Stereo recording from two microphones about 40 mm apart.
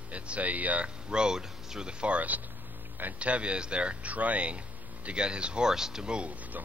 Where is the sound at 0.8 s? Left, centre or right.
Right.